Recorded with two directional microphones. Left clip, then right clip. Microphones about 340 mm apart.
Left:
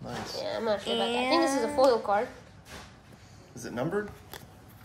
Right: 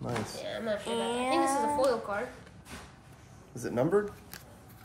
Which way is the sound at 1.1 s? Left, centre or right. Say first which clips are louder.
Left 2 dB; centre.